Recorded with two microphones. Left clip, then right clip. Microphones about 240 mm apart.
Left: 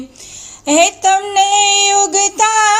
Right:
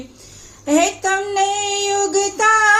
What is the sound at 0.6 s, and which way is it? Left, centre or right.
Female singing, left.